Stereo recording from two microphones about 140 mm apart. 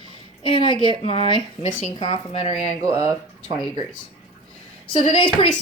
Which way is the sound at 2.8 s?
25° right (ahead or behind).